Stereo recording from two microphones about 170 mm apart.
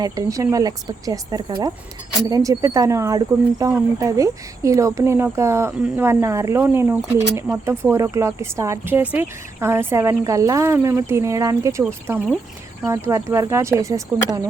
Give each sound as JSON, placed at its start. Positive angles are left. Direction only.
{"t": 0.0, "sound": "speech", "side_deg": -20}
{"t": 12.8, "sound": "speech", "side_deg": -15}